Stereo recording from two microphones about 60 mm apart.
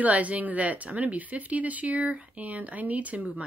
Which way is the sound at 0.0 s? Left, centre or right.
Right.